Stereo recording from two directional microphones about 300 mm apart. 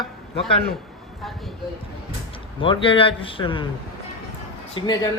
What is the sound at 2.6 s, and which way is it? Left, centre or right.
Speech, centre.